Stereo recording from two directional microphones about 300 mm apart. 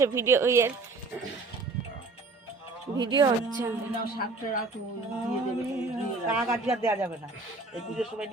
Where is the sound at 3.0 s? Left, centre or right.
Centre.